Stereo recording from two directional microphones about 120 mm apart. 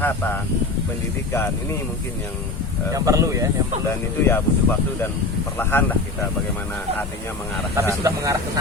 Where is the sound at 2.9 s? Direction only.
30° right (ahead or behind).